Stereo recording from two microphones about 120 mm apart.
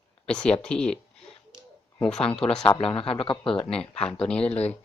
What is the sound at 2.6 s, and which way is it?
Speech, 45° left (ahead or behind).